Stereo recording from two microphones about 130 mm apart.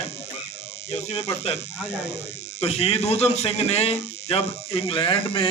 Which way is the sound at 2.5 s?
50° left (ahead or behind).